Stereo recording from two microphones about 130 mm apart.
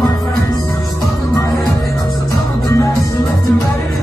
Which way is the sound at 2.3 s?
25° left (ahead or behind).